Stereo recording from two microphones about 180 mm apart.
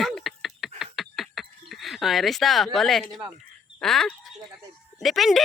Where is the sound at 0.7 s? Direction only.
Centre (ahead or behind).